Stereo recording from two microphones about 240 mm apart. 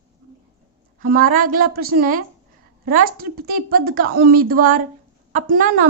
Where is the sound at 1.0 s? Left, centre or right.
Right.